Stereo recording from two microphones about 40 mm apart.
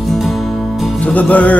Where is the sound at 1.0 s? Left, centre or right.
Left.